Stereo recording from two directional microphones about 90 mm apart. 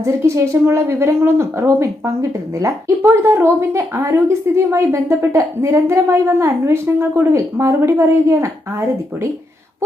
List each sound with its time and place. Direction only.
0.0 s speech: 35° right (ahead or behind)